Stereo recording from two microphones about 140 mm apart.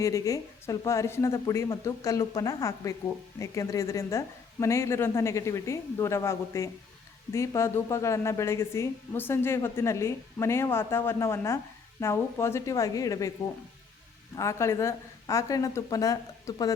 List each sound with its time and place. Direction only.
0.0 s a woman's voice: 20° left (ahead or behind)
14.3 s a woman's voice: 20° left (ahead or behind)